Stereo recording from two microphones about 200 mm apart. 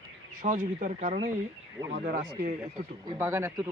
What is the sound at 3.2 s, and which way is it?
Speech, 10° right (ahead or behind).